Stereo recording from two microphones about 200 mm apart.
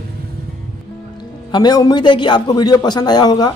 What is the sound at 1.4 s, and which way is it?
A man's voice, 20° left (ahead or behind).